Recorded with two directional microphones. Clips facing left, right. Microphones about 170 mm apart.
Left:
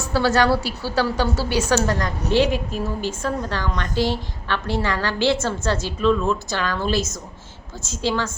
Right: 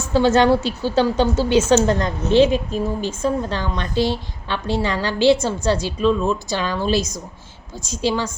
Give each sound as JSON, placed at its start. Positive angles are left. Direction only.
{"t": 0.1, "sound": "a woman's voice", "side_deg": -20}